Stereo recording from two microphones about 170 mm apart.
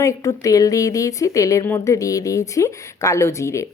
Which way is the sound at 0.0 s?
20° left (ahead or behind).